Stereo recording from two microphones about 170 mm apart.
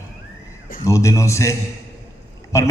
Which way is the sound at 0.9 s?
20° left (ahead or behind).